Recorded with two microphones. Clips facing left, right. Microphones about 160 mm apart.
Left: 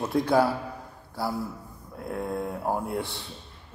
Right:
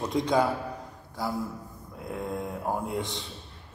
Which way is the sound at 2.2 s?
10° left (ahead or behind).